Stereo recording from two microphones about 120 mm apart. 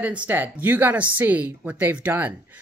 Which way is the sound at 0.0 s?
10° right (ahead or behind).